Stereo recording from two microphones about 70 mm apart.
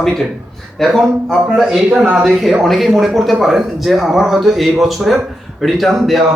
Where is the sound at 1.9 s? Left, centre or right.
Centre.